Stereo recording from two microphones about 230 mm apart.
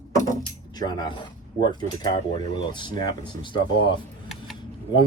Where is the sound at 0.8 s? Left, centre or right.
Centre.